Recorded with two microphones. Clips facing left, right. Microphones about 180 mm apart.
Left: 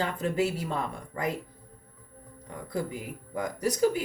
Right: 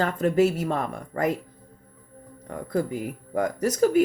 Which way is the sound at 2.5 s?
55° right (ahead or behind).